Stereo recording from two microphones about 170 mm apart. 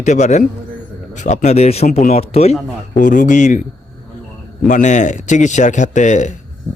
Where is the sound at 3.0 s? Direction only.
50° left (ahead or behind).